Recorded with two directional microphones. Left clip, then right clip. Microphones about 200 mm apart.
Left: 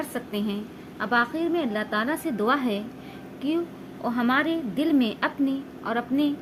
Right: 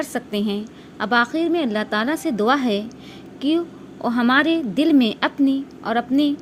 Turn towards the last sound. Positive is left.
turn(degrees=-35)  # may be behind; listen again after turning